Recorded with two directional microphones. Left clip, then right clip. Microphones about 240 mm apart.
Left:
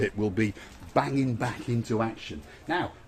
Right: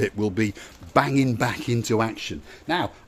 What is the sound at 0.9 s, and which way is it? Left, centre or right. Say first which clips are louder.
Speech: right 6 dB; right.